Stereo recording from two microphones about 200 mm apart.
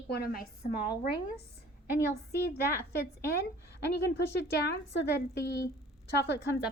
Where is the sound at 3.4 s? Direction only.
55° left (ahead or behind).